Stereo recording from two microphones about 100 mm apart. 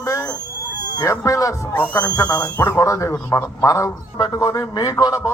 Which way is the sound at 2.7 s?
35° left (ahead or behind).